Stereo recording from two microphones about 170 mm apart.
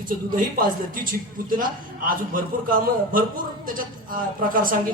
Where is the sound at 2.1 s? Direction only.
55° right (ahead or behind).